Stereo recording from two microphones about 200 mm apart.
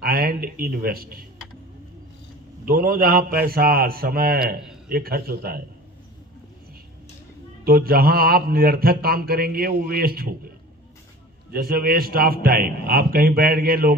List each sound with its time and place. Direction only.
0.0 s speech: 45° right (ahead or behind)
2.6 s mantra: 45° right (ahead or behind)
7.6 s mantra: 50° right (ahead or behind)
11.5 s mantra: 50° right (ahead or behind)